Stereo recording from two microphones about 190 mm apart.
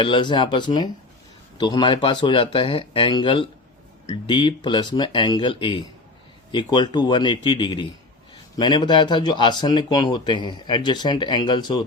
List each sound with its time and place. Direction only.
0.0 s speech: 25° left (ahead or behind)